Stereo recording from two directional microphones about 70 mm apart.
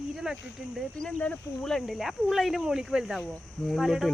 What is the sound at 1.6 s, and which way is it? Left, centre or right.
Speech, centre.